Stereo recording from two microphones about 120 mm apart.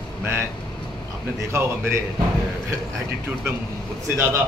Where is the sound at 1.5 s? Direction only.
20° right (ahead or behind).